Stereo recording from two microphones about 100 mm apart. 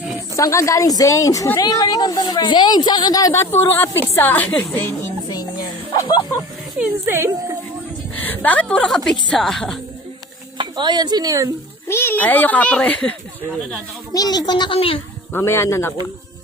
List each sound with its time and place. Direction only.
0.3 s a woman's voice: 30° left (ahead or behind)
3.4 s a woman's voice: 25° left (ahead or behind)
6.7 s speech: 15° right (ahead or behind)
8.1 s a sound: 20° left (ahead or behind)
9.0 s a woman's voice: 5° left (ahead or behind)
10.6 s speech: 50° right (ahead or behind)
11.9 s a child's voice: 25° left (ahead or behind)
14.1 s a woman's voice: 40° left (ahead or behind)
14.8 s speech: 65° left (ahead or behind)
15.3 s a woman's voice: 25° left (ahead or behind)